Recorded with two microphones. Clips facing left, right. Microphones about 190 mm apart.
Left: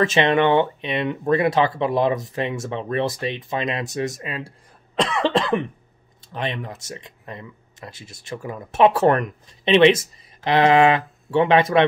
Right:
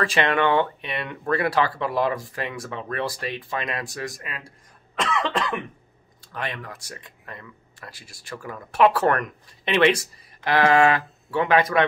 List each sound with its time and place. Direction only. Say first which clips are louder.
0.0 s speech: left 4 dB; 20° left (ahead or behind)
6.2 s speech: left 5 dB; 20° left (ahead or behind)